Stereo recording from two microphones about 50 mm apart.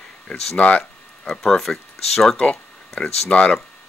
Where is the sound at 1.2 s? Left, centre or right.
Centre.